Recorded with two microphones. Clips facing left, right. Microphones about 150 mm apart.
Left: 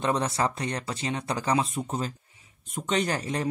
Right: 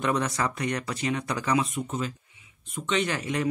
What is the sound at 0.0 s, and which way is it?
Speech, 30° left (ahead or behind).